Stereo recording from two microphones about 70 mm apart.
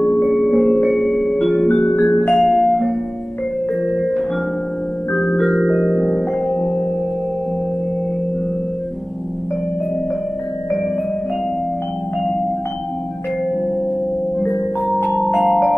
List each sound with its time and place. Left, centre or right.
0.3 s music: centre
2.3 s music: centre
5.1 s music: centre
5.5 s music: centre
6.5 s music: centre
14.5 s music: centre